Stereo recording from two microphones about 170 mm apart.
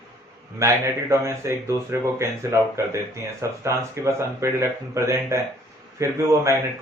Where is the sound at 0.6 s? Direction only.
15° right (ahead or behind).